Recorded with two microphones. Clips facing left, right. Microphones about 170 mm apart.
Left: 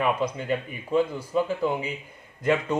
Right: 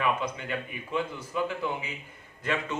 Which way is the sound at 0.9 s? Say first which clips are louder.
Left 7 dB; 35° left (ahead or behind).